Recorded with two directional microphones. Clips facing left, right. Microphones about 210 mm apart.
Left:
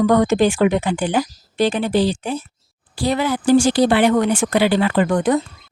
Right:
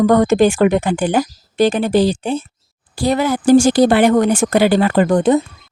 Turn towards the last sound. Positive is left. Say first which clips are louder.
# right 4 dB
turn(degrees=-30)  # may be behind; listen again after turning